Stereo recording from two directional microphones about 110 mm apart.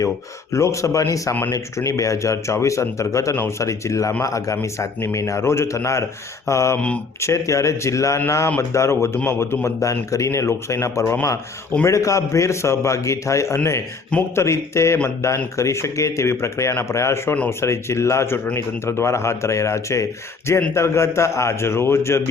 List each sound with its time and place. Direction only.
0.5 s a man's voice: 30° left (ahead or behind)